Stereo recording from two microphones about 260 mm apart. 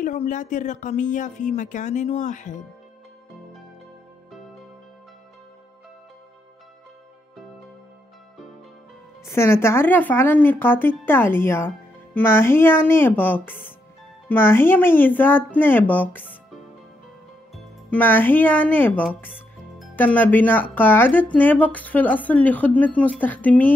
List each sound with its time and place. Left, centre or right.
0.0 s speech: left
9.3 s speech: centre
17.8 s speech: centre